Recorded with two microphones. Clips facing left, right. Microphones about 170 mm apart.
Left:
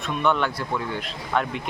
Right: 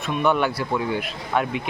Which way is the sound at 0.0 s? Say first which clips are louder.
Right 2 dB; 5° right (ahead or behind).